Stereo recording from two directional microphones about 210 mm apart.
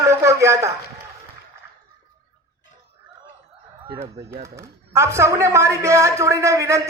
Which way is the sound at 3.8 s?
20° right (ahead or behind).